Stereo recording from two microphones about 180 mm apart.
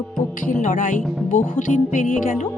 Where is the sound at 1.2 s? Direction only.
45° left (ahead or behind).